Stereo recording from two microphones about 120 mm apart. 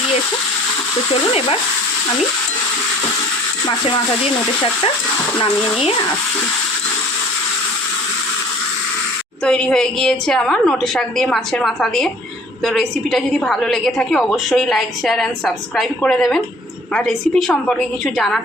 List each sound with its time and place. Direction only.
1.3 s frying: 50° left (ahead or behind)
9.4 s a woman's voice: 10° left (ahead or behind)